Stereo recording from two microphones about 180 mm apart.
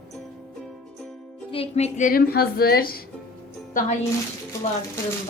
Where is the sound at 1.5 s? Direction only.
35° left (ahead or behind); by 3.0 s 55° left (ahead or behind).